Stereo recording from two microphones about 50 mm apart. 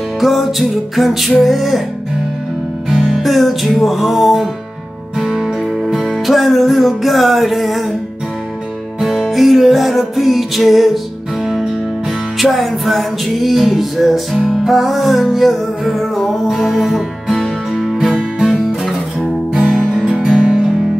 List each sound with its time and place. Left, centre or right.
0.2 s music: centre
2.9 s music: centre
9.1 s music: centre
17.9 s music: centre
19.8 s music: centre
20.3 s music: centre